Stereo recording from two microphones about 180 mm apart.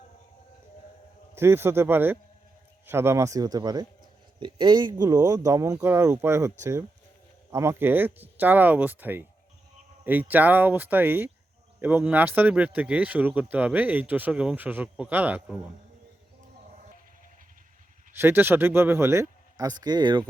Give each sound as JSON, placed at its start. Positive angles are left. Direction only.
{"t": 1.4, "sound": "speech", "side_deg": -15}
{"t": 18.2, "sound": "speech", "side_deg": -10}